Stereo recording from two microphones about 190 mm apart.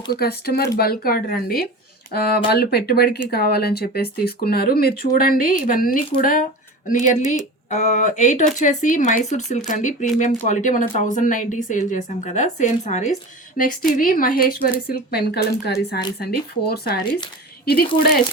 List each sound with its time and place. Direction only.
0.1 s speech: 55° left (ahead or behind)